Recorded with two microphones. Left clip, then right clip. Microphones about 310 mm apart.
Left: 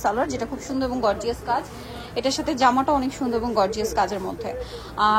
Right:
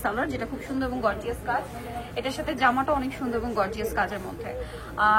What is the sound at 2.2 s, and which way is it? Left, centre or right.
A woman's voice, centre.